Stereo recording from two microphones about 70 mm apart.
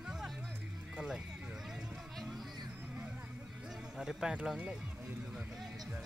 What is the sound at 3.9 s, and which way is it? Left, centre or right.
Speech, centre.